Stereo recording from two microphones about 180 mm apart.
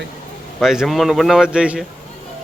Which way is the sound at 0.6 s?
Centre (ahead or behind).